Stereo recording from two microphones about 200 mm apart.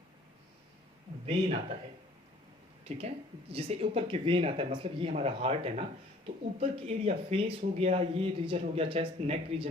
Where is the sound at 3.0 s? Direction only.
30° right (ahead or behind).